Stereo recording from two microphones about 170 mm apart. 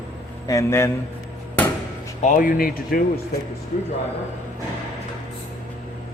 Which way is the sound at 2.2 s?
50° left (ahead or behind).